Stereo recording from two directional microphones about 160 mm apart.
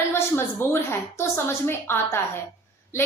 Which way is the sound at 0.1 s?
15° left (ahead or behind).